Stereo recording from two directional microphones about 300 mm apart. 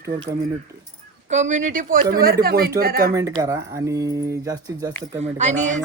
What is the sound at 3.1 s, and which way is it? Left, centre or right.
A woman's voice, centre.